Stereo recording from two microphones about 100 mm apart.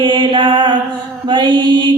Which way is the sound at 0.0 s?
50° right (ahead or behind).